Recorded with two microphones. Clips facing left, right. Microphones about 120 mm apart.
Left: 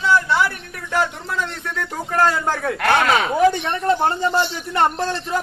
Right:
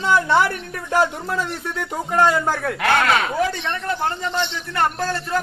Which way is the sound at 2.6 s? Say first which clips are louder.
Left 3 dB; centre (ahead or behind).